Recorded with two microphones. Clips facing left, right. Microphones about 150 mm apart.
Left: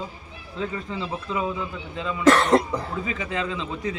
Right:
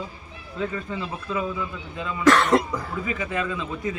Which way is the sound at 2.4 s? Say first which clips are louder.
Left 1 dB; 35° left (ahead or behind).